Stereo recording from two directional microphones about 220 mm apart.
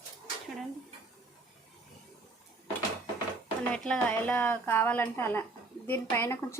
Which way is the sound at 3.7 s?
5° left (ahead or behind).